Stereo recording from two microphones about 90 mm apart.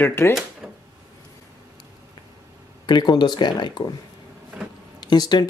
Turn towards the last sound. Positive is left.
turn(degrees=50)  # may be behind; listen again after turning